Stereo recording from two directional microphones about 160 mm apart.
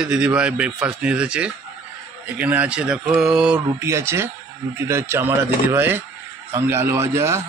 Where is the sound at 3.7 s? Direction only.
15° right (ahead or behind).